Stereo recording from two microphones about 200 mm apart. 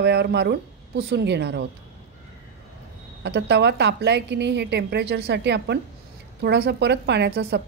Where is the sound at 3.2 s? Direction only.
60° right (ahead or behind).